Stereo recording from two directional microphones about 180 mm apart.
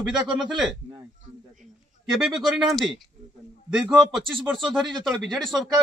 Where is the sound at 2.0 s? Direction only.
Centre (ahead or behind).